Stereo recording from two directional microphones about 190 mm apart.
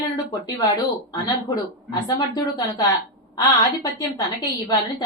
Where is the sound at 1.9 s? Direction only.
20° left (ahead or behind).